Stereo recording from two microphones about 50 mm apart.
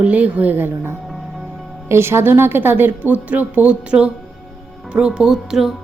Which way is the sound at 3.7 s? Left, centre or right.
Right.